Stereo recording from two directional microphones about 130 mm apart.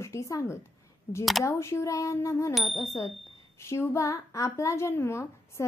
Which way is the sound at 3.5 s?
20° left (ahead or behind).